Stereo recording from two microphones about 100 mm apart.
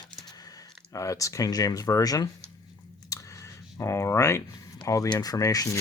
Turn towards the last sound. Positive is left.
turn(degrees=30)  # may be behind; listen again after turning